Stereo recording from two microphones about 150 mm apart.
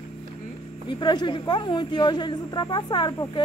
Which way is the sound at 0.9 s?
30° left (ahead or behind).